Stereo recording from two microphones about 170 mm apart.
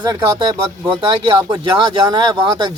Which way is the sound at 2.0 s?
25° right (ahead or behind).